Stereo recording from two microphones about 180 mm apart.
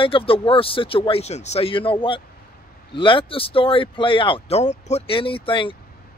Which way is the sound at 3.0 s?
30° left (ahead or behind).